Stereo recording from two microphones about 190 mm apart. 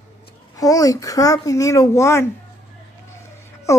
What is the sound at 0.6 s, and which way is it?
Speech, 20° left (ahead or behind).